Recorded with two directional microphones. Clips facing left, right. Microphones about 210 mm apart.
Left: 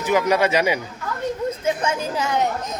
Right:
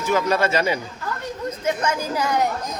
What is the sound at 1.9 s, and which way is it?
Speech, 25° left (ahead or behind).